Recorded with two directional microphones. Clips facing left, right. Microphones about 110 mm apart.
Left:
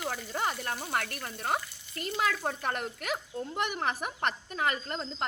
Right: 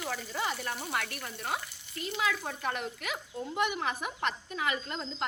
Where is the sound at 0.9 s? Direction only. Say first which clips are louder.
Left 2 dB; 40° left (ahead or behind).